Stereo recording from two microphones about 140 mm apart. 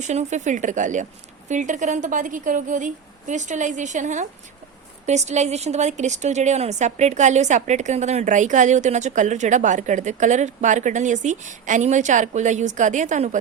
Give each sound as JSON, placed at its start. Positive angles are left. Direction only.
{"t": 0.0, "sound": "a woman's voice", "side_deg": -55}